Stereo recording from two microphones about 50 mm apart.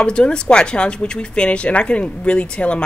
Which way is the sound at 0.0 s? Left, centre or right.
Centre.